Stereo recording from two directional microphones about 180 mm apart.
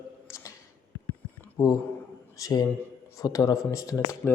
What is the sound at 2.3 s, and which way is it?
A man's voice, 20° left (ahead or behind).